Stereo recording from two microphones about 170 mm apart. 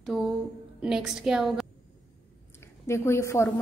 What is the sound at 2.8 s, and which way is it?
Speech, 15° left (ahead or behind).